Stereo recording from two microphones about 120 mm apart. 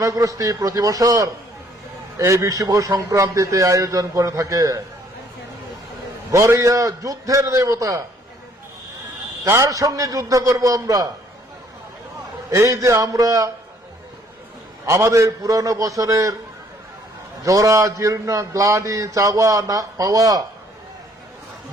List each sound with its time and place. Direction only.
0.0 s a man's voice: 30° right (ahead or behind)
6.3 s a man's voice: 25° right (ahead or behind)
9.4 s a man's voice: 25° right (ahead or behind)
12.5 s a man's voice: 25° right (ahead or behind)
14.8 s a man's voice: 25° right (ahead or behind)
17.4 s a man's voice: 30° right (ahead or behind)